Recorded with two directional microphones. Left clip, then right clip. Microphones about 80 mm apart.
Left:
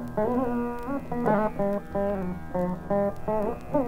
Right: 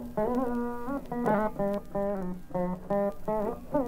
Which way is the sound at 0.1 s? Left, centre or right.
Left.